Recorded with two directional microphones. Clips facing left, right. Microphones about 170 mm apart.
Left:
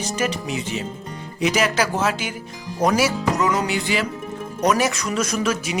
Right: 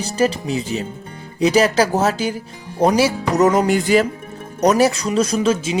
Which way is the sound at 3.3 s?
45° right (ahead or behind).